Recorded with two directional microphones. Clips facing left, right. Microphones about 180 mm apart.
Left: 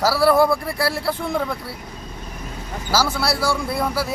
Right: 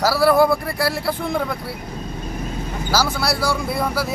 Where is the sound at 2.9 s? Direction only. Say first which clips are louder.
Even; centre (ahead or behind).